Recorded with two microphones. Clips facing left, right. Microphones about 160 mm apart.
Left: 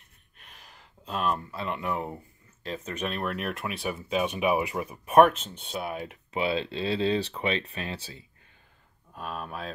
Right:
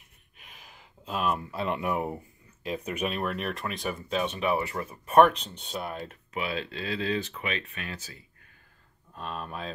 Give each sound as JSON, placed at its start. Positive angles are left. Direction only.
{"t": 0.4, "sound": "a sound", "side_deg": -5}
{"t": 1.5, "sound": "speech", "side_deg": -20}
{"t": 6.3, "sound": "speech", "side_deg": 30}
{"t": 9.1, "sound": "speech", "side_deg": 5}